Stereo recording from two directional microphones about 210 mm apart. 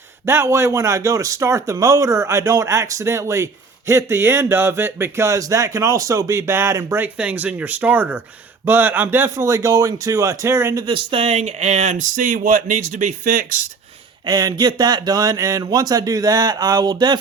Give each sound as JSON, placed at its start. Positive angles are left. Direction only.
{"t": 0.3, "sound": "speech", "side_deg": -10}
{"t": 10.8, "sound": "speech", "side_deg": -25}
{"t": 14.3, "sound": "speech", "side_deg": -20}